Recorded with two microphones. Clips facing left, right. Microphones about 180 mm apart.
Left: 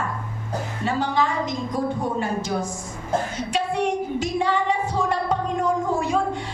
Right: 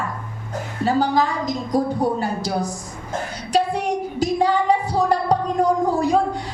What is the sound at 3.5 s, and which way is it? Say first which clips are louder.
Singing: right 3 dB; 35° right (ahead or behind).